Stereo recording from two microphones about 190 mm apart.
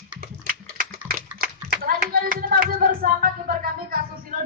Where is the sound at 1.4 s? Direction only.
50° right (ahead or behind).